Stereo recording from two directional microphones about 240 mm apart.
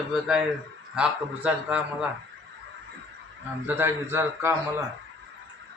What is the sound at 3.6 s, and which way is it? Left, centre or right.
Speech, centre.